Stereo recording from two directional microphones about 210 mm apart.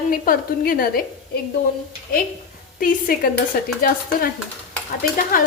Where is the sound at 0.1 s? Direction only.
45° left (ahead or behind).